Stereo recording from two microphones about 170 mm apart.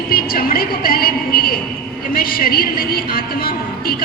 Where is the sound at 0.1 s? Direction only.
60° left (ahead or behind).